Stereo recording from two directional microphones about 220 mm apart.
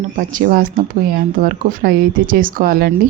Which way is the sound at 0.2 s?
35° right (ahead or behind).